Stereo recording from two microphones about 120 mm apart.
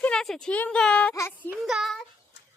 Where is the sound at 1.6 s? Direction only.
Centre (ahead or behind).